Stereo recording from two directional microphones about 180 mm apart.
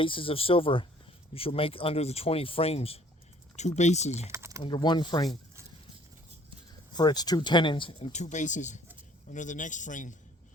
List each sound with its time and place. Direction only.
0.0 s speech: 30° left (ahead or behind)
4.3 s a sound: 15° right (ahead or behind)
4.6 s speech: 25° left (ahead or behind)
6.9 s speech: 25° left (ahead or behind); by 10.2 s 45° left (ahead or behind)